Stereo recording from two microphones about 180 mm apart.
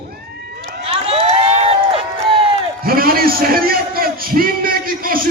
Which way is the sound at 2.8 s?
55° right (ahead or behind).